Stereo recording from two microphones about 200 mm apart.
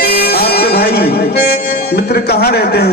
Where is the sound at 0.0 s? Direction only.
50° left (ahead or behind).